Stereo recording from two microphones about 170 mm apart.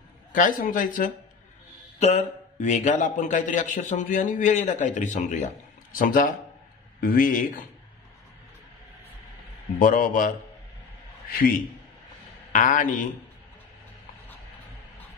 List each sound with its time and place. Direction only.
0.3 s a man's voice: 55° left (ahead or behind)
2.0 s a man's voice: 40° left (ahead or behind); by 7.6 s 55° left (ahead or behind)
9.8 s a man's voice: 55° left (ahead or behind)
12.5 s a man's voice: 50° left (ahead or behind)